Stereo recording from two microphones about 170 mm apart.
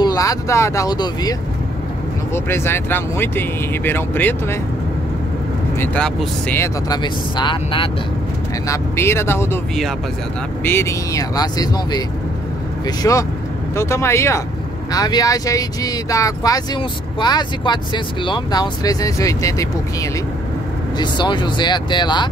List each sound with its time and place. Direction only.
0.0 s speech: 20° left (ahead or behind)
2.3 s speech: 15° left (ahead or behind)
5.8 s speech: 5° left (ahead or behind); by 7.9 s 30° left (ahead or behind)
8.6 s speech: 15° left (ahead or behind)
10.6 s speech: 15° left (ahead or behind)